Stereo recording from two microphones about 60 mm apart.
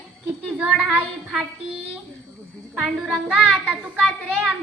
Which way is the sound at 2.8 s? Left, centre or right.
Centre.